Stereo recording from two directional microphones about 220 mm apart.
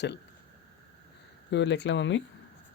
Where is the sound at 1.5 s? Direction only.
55° left (ahead or behind).